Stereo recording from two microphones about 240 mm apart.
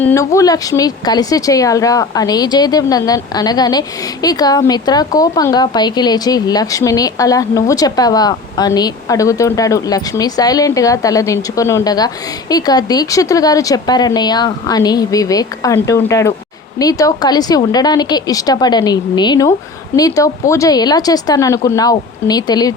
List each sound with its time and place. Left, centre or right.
0.0 s speech: centre